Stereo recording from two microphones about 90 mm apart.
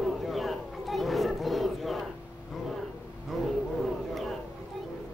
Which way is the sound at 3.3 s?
Centre (ahead or behind).